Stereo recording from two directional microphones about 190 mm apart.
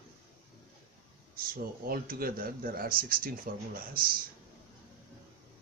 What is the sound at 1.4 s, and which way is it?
Speech, 50° right (ahead or behind).